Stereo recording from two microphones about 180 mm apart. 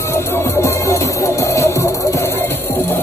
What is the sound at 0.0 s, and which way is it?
Music, 15° left (ahead or behind).